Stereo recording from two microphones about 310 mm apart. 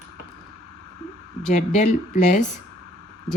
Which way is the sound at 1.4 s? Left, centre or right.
Left.